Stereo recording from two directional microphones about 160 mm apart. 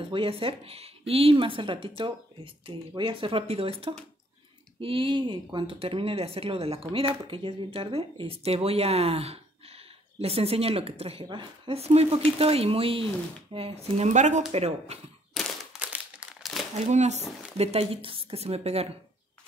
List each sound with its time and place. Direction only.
0.1 s speech: 35° right (ahead or behind)
15.3 s crumpling: 5° right (ahead or behind)
16.8 s speech: 45° right (ahead or behind)